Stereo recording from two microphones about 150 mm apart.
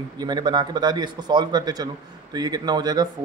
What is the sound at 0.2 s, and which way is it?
A man's voice, 30° right (ahead or behind).